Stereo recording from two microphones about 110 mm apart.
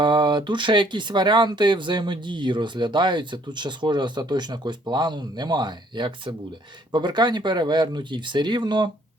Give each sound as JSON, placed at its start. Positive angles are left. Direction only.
{"t": 0.0, "sound": "speech", "side_deg": -45}